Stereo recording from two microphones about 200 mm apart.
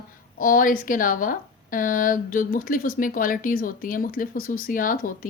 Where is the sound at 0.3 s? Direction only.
45° left (ahead or behind).